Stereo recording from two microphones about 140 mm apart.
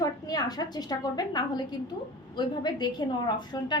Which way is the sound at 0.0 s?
30° left (ahead or behind).